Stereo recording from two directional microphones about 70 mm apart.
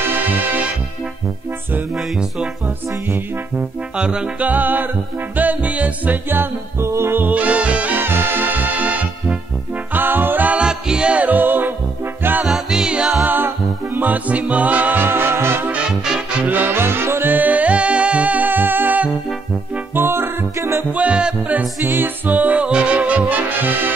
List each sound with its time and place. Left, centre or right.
0.0 s music: right
3.9 s music: centre
4.5 s music: right
9.9 s a capella: right
12.2 s music: right
12.4 s music: centre
13.2 s music: right
15.7 s music: centre
19.9 s music: right
20.9 s music: centre
21.8 s music: right